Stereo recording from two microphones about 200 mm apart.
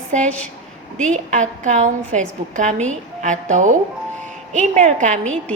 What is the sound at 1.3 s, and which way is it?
A woman's voice, 40° right (ahead or behind).